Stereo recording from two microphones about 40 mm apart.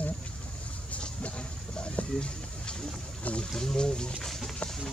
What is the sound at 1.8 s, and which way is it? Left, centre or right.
Speech, left.